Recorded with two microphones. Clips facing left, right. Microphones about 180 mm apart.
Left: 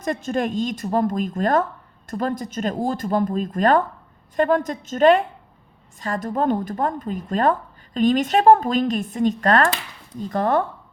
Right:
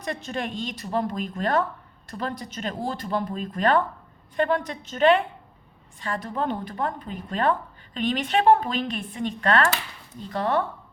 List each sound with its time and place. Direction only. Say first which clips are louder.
0.0 s speech: left 7 dB; 45° left (ahead or behind)